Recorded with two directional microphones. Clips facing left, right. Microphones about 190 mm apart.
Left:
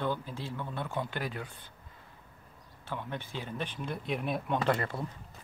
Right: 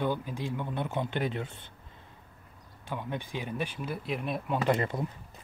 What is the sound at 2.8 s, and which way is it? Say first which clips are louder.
Speech: right 3 dB; 15° right (ahead or behind).